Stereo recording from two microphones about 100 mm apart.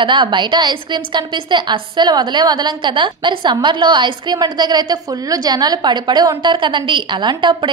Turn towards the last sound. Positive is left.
turn(degrees=-50)  # may be behind; listen again after turning